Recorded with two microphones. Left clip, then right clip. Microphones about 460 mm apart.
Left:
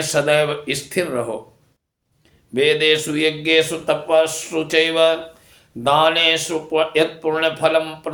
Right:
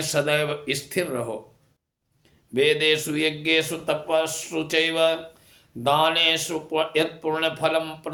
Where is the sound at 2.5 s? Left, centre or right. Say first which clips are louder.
Left 4 dB; right.